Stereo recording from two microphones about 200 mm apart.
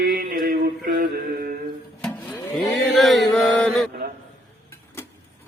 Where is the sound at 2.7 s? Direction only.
Centre (ahead or behind).